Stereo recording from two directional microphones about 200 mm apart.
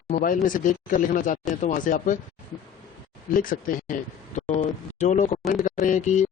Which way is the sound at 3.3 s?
45° left (ahead or behind).